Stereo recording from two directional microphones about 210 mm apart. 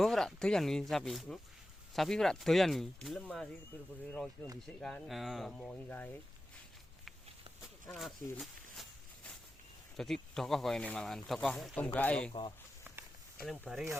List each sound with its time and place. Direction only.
0.0 s speech: centre (ahead or behind)
4.6 s speech: 5° left (ahead or behind)
7.9 s a sound: centre (ahead or behind)
10.0 s speech: centre (ahead or behind)
12.3 s speech: 25° left (ahead or behind)
13.4 s speech: centre (ahead or behind)